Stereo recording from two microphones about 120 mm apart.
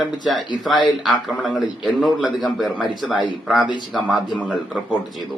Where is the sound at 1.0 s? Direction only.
Centre (ahead or behind).